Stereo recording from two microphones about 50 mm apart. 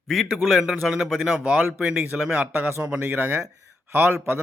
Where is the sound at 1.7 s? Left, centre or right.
Right.